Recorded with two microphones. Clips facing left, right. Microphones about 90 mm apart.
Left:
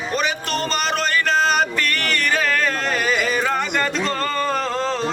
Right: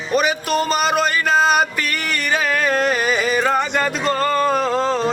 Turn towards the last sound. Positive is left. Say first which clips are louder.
# right 4 dB
turn(degrees=-5)  # may be behind; listen again after turning